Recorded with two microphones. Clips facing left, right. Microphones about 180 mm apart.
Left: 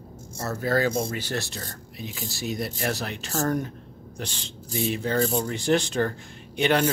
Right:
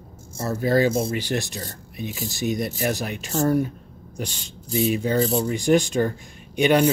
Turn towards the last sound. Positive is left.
turn(degrees=-15)  # may be behind; listen again after turning